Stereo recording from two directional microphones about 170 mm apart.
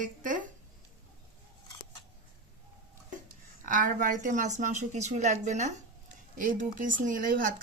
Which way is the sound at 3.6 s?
50° right (ahead or behind).